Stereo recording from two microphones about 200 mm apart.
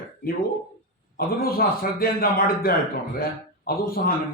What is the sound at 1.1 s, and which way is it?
A man's voice, 50° left (ahead or behind).